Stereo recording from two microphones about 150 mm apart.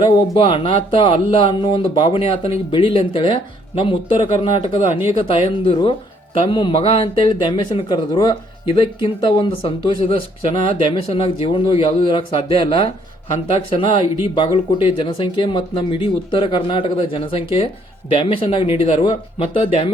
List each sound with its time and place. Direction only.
0.3 s speech: 35° left (ahead or behind)